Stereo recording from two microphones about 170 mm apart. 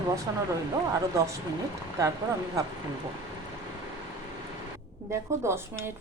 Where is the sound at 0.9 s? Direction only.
20° right (ahead or behind).